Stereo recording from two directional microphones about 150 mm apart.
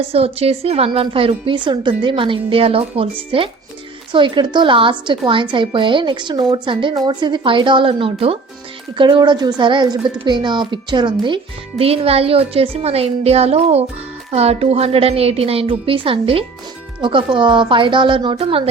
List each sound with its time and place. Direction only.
0.1 s a woman's voice: 40° right (ahead or behind)